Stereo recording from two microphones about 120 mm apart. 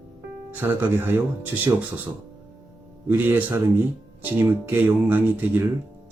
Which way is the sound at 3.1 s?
15° right (ahead or behind).